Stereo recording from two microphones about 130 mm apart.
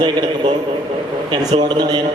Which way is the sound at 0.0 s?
35° right (ahead or behind).